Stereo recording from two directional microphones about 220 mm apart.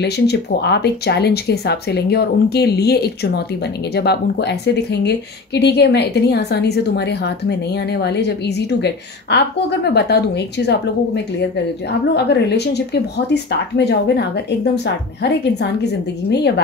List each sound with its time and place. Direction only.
0.0 s speech: 50° left (ahead or behind)
12.1 s speech: 50° left (ahead or behind)